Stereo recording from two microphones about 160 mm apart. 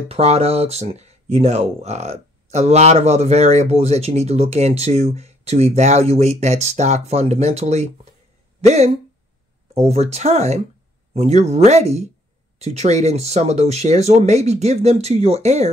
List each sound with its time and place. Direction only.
0.1 s speech: 40° right (ahead or behind)